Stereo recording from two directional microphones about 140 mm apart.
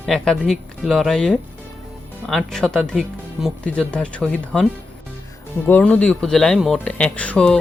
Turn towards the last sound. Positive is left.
turn(degrees=5)  # may be behind; listen again after turning